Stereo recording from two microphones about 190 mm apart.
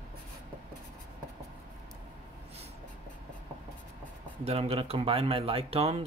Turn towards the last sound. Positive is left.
turn(degrees=-30)  # may be behind; listen again after turning